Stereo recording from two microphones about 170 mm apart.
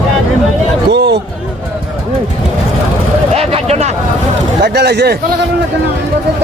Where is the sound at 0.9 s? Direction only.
90° right.